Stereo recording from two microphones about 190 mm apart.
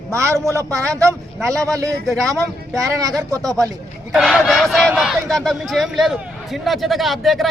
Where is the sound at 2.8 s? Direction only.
15° right (ahead or behind).